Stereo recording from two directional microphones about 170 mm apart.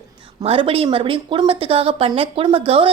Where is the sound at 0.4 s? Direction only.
35° right (ahead or behind).